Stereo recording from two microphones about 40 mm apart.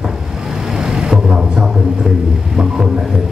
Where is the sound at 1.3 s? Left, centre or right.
Right.